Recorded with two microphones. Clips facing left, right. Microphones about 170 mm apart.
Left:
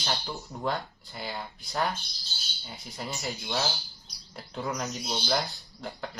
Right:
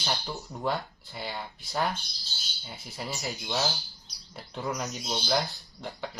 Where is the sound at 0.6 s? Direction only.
Centre (ahead or behind).